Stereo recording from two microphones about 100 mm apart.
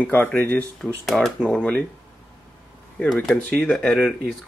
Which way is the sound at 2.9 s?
5° left (ahead or behind).